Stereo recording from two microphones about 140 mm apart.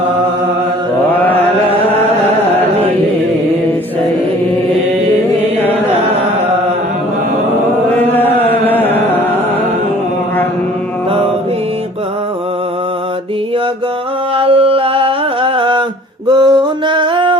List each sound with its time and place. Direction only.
8.1 s chant: 15° left (ahead or behind)
8.6 s music: 15° left (ahead or behind)
14.3 s mantra: 45° right (ahead or behind)
16.2 s a sound: 30° right (ahead or behind)